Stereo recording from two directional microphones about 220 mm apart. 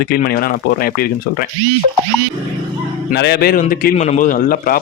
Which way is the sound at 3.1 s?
45° left (ahead or behind).